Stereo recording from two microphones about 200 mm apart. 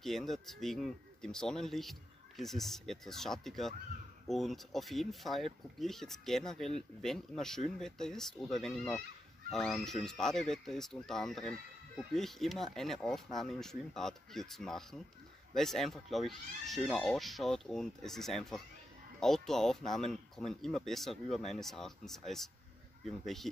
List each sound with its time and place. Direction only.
0.0 s speech: centre (ahead or behind)